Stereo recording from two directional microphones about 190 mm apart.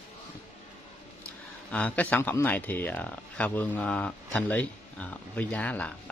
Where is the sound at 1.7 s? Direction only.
5° left (ahead or behind).